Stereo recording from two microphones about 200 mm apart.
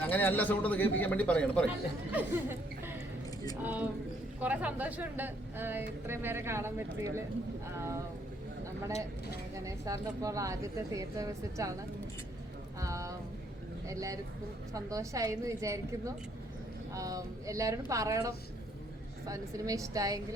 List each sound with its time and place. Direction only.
0.0 s a man's voice: 10° left (ahead or behind)
2.1 s a woman's voice: 10° right (ahead or behind)
9.6 s a woman's voice: 15° right (ahead or behind)
12.8 s a woman's voice: 15° right (ahead or behind)